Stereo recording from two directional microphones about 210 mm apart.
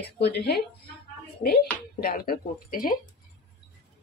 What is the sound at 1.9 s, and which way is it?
A woman's voice, 45° left (ahead or behind).